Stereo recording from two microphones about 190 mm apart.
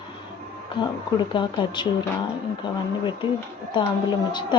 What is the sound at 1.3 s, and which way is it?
Speech, 25° left (ahead or behind).